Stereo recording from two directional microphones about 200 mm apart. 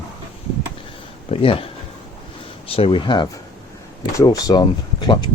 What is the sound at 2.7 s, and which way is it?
Speech, 25° left (ahead or behind).